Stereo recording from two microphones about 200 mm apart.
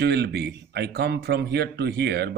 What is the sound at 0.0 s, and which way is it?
Speech, 55° right (ahead or behind).